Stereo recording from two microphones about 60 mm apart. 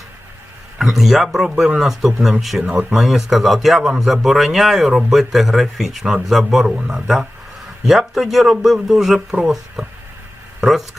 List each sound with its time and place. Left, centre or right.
0.8 s speech: centre
2.6 s a man's voice: centre
3.0 s speech: centre
6.6 s a man's voice: centre